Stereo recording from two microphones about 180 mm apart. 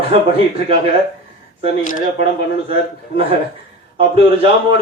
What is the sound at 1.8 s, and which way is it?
Speech, 45° left (ahead or behind).